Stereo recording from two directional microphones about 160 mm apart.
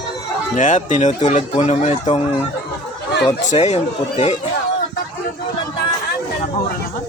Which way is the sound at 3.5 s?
45° left (ahead or behind).